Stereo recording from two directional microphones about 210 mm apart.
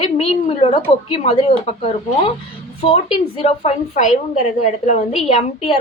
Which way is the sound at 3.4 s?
30° left (ahead or behind).